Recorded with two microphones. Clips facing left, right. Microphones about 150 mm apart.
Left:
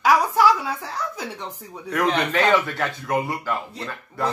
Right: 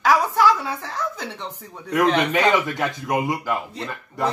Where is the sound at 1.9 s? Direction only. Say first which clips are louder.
Right 3 dB; 10° right (ahead or behind).